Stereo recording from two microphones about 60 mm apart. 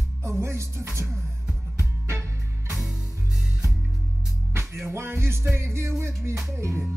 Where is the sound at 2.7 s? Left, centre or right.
Centre.